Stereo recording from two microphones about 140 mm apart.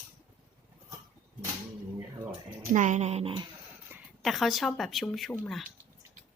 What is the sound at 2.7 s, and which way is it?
Speech, 60° right (ahead or behind).